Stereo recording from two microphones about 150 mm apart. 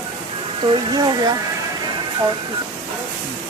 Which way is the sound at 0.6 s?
30° right (ahead or behind).